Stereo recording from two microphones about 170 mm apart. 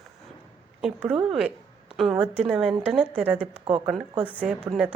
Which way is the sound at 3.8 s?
5° right (ahead or behind).